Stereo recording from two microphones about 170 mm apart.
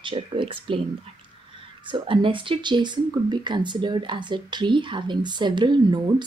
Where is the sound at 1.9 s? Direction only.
30° right (ahead or behind).